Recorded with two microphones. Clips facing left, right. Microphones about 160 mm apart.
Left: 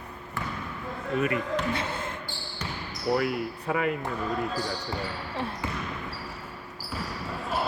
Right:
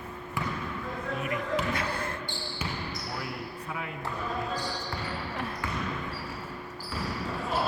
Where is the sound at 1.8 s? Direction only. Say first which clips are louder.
Even; 20° left (ahead or behind).